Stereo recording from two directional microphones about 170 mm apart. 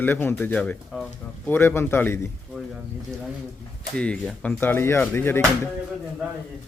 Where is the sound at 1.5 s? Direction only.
15° left (ahead or behind).